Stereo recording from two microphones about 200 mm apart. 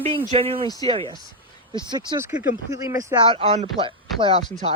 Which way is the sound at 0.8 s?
25° right (ahead or behind).